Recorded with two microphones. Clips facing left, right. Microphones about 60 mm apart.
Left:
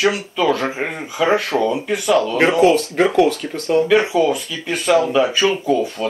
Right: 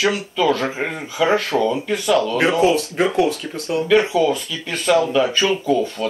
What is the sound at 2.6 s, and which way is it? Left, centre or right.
Speech, left.